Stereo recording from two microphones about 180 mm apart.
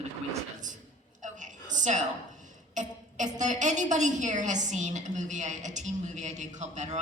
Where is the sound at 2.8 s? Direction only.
45° right (ahead or behind).